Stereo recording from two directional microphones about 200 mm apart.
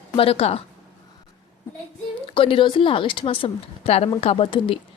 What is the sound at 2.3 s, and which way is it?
A woman's voice, 25° left (ahead or behind).